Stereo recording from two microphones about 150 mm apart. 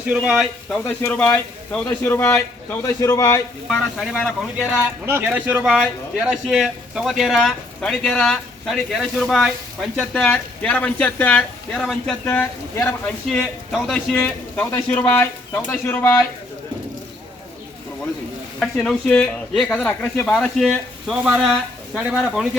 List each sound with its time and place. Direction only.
0.1 s speech: 5° right (ahead or behind)
1.0 s speech: 15° left (ahead or behind)
3.7 s speech: centre (ahead or behind)
5.0 s a man's voice: 15° right (ahead or behind); by 12.9 s 15° left (ahead or behind)
13.2 s a man's voice: centre (ahead or behind); by 16.2 s 20° left (ahead or behind)
18.6 s a man's voice: 5° left (ahead or behind)
20.7 s speech: 5° right (ahead or behind)